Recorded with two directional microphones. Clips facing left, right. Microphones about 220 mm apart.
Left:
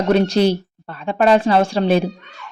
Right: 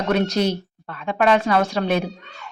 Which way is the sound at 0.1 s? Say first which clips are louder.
Left 5 dB; 30° left (ahead or behind).